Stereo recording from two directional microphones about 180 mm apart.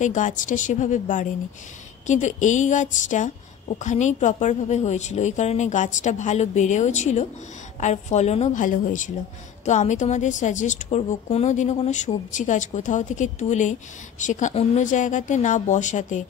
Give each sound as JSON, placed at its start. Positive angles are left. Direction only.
{"t": 0.0, "sound": "a woman's voice", "side_deg": 45}